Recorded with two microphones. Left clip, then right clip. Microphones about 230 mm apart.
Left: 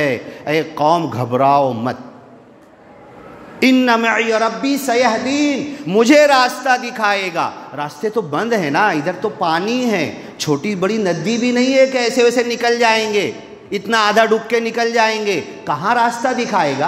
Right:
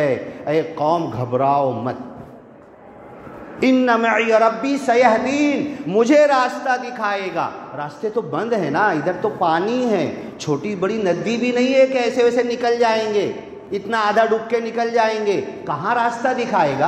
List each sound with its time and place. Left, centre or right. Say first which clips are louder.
0.0 s a man's voice: left 1 dB; left
3.5 s a woman's voice: left 3 dB; left